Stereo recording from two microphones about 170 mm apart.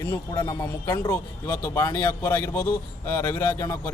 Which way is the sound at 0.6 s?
20° left (ahead or behind).